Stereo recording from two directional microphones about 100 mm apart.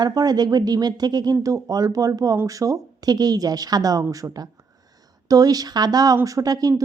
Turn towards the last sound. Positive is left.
turn(degrees=-40)  # may be behind; listen again after turning